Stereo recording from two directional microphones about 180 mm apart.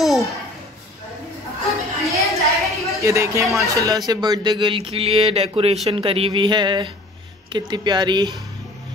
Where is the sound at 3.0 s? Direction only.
15° right (ahead or behind).